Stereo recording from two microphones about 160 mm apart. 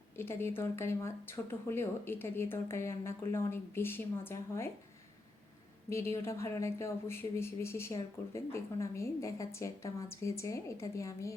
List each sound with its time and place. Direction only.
0.2 s speech: 15° left (ahead or behind)
5.9 s speech: 15° left (ahead or behind)